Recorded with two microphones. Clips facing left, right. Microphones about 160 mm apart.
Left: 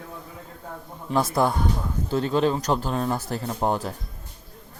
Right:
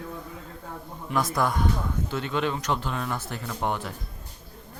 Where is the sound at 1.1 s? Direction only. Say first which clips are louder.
Left 4 dB; 30° left (ahead or behind).